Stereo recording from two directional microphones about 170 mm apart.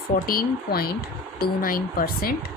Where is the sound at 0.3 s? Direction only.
60° left (ahead or behind).